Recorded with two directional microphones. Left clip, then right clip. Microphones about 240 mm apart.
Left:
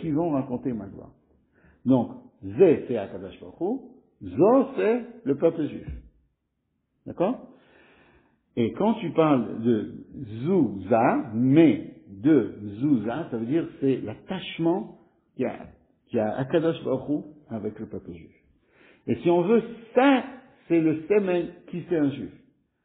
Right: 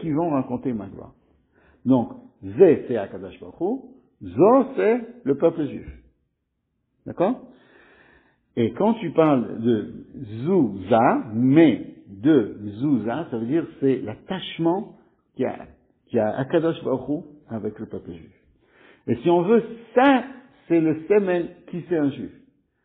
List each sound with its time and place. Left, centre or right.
0.1 s a man's voice: right
0.5 s a man's voice: right
1.9 s a man's voice: right
7.1 s a man's voice: right
8.5 s a man's voice: right
9.4 s a man's voice: centre
9.7 s a man's voice: right
12.2 s a man's voice: right
18.8 s a sound: right
19.8 s a man's voice: right